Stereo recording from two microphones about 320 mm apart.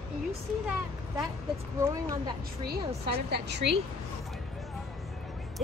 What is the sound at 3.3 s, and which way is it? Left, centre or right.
Speech, right.